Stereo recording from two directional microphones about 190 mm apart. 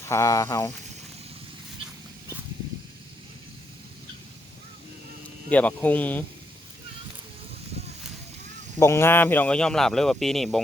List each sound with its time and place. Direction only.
0.1 s speech: 15° left (ahead or behind)
5.5 s speech: 10° left (ahead or behind)
8.8 s speech: 15° left (ahead or behind)